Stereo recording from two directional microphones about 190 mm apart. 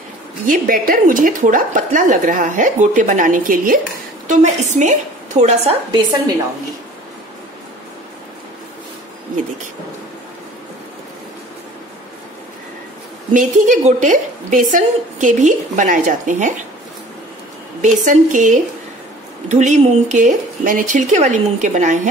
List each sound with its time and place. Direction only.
0.5 s a woman's voice: 45° right (ahead or behind)
13.3 s a woman's voice: 40° right (ahead or behind)
17.8 s a woman's voice: 45° right (ahead or behind)